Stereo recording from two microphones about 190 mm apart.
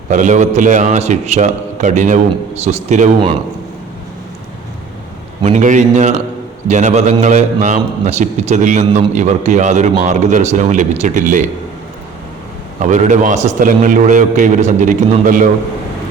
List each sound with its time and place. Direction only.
0.1 s a man's voice: 40° right (ahead or behind)
5.4 s a man's voice: 40° right (ahead or behind)
12.8 s a man's voice: 40° right (ahead or behind)